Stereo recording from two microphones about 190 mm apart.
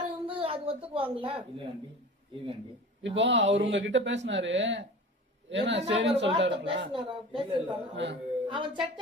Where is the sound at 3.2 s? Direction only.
70° right (ahead or behind).